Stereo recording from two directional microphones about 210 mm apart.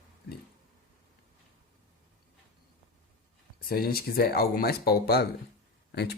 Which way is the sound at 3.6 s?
45° left (ahead or behind).